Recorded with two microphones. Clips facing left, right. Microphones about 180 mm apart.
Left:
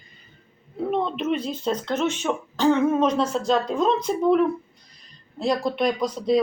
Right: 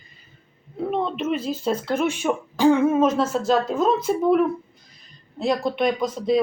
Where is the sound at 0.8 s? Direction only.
Centre (ahead or behind).